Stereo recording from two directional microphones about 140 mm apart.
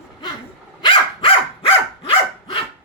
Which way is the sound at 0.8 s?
40° left (ahead or behind).